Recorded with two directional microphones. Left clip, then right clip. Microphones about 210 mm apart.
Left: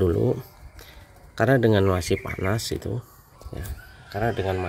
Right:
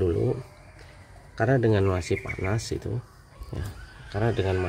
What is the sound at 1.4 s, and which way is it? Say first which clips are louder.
Speech: left 4 dB; 20° left (ahead or behind).